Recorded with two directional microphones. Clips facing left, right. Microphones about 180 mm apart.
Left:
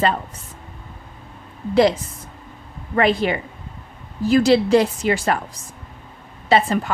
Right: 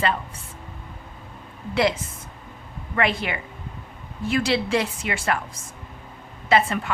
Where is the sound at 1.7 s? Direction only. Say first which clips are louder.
Left 6 dB; 35° left (ahead or behind).